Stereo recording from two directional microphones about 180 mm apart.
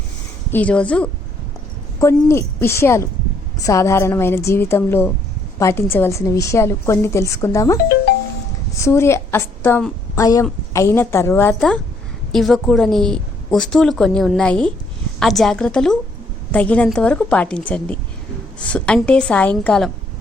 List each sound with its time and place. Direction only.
0.5 s a woman's voice: 5° left (ahead or behind)
8.8 s a woman's voice: 15° left (ahead or behind)
12.3 s a woman's voice: centre (ahead or behind)